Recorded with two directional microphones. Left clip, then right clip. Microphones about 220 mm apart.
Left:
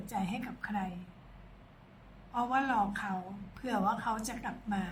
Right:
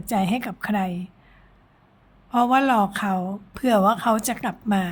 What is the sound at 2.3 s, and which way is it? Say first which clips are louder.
A woman's voice: right 12 dB; 50° right (ahead or behind).